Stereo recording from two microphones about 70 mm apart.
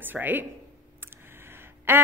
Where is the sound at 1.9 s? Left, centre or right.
Right.